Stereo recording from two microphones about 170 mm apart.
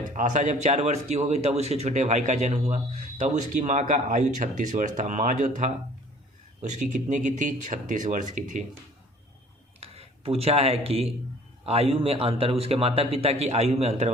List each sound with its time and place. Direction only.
0.1 s speech: 45° right (ahead or behind)
9.8 s a man's voice: 35° right (ahead or behind)